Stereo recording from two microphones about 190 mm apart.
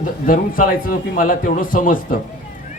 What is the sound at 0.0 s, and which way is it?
A man's voice, 45° left (ahead or behind).